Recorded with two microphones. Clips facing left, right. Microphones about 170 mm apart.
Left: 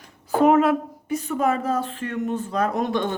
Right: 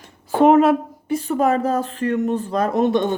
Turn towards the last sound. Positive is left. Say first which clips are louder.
# right 5 dB
turn(degrees=-20)  # may be behind; listen again after turning